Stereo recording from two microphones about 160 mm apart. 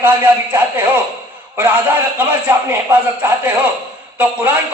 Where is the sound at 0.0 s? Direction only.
10° right (ahead or behind).